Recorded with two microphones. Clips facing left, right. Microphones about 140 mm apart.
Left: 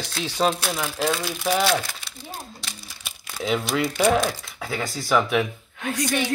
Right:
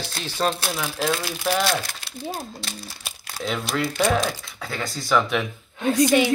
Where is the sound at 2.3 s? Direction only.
40° right (ahead or behind).